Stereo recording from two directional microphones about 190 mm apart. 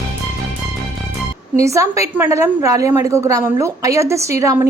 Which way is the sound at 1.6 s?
15° right (ahead or behind).